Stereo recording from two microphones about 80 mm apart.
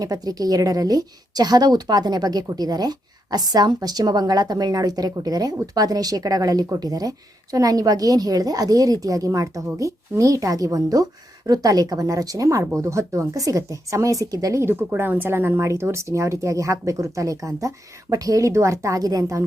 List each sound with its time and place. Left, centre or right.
0.0 s a woman's voice: right
14.6 s speech: right